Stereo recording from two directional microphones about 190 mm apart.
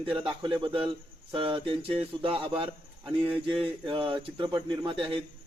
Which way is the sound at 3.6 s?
25° right (ahead or behind).